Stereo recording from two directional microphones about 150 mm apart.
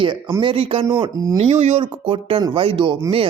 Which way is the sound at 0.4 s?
40° right (ahead or behind).